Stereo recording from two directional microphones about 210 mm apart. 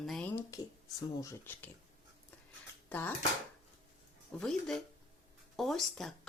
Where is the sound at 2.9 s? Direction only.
10° left (ahead or behind).